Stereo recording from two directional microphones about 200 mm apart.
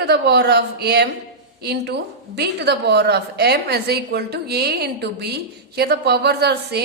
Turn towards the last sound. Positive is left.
turn(degrees=-55)  # may be behind; listen again after turning